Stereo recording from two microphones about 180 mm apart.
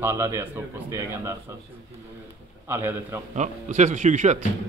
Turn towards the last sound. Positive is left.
turn(degrees=-45)  # may be behind; listen again after turning